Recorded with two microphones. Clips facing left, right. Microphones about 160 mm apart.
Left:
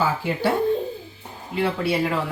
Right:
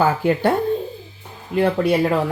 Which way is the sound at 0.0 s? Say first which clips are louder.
Right 5 dB; 55° right (ahead or behind).